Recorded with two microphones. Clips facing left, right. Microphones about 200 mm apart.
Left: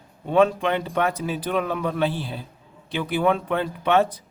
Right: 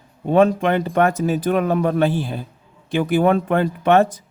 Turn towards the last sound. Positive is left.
turn(degrees=-50)  # may be behind; listen again after turning